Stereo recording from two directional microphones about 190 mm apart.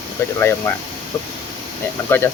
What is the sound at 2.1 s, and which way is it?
Speech, 10° left (ahead or behind).